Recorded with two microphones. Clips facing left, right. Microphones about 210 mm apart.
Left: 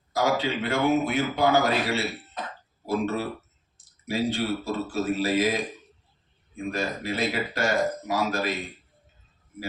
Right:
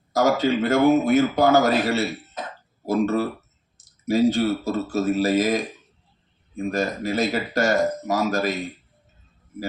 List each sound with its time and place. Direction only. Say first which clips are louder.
0.1 s a man's voice: right 5 dB; 45° right (ahead or behind)